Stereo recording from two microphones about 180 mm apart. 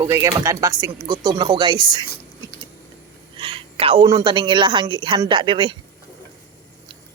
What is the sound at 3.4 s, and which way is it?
A woman's voice, 30° right (ahead or behind).